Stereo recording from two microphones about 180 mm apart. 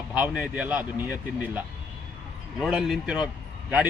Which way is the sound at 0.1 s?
5° right (ahead or behind).